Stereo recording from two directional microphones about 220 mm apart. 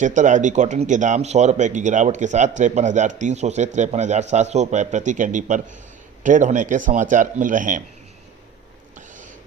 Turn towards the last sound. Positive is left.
turn(degrees=-35)  # may be behind; listen again after turning